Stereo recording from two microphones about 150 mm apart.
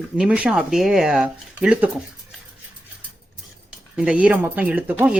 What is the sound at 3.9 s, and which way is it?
Speech, 10° right (ahead or behind).